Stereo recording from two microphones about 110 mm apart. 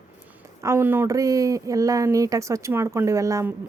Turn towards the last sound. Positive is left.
turn(degrees=-30)  # may be behind; listen again after turning